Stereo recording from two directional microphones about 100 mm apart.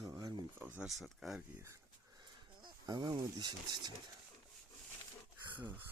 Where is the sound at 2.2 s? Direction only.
45° right (ahead or behind).